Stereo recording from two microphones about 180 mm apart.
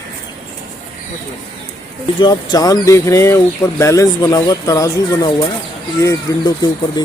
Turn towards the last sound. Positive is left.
turn(degrees=20)  # may be behind; listen again after turning